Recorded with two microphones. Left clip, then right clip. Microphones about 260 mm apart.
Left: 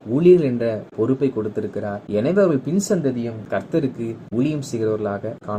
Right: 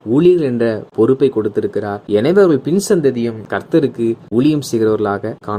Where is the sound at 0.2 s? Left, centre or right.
Right.